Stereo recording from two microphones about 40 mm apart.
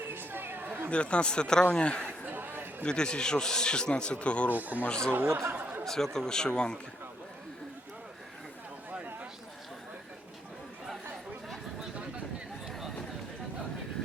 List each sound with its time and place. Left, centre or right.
0.1 s chatter: right
0.9 s a man's voice: left
2.3 s a sound: right
2.8 s a man's voice: left
4.5 s speech: right
5.1 s speech: right
5.8 s speech: centre